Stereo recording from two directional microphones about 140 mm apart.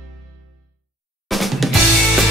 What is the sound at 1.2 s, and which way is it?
Music, centre (ahead or behind).